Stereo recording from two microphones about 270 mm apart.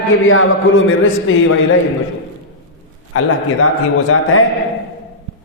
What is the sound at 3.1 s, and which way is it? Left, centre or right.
Speech, left.